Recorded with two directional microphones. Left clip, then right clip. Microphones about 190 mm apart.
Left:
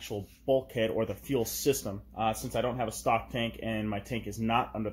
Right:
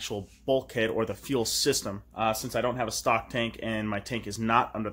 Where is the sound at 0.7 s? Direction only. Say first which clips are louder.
Right 2 dB; 15° right (ahead or behind).